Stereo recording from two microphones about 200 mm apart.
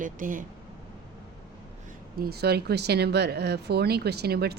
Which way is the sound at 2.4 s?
55° right (ahead or behind).